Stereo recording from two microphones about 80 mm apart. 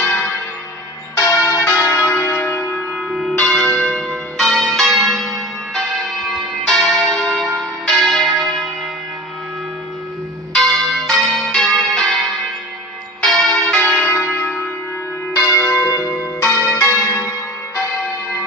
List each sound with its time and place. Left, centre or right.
1.1 s church bell: left
3.4 s church bell: centre
10.5 s change ringing: centre
13.2 s church bell: centre
13.7 s church bell: centre
15.3 s church bell: left
16.8 s change ringing: left